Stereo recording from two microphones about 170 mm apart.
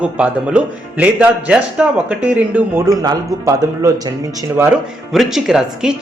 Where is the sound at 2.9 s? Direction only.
20° right (ahead or behind).